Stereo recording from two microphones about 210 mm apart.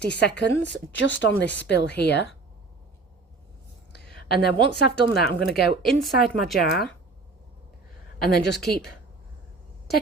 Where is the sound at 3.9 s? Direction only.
50° left (ahead or behind).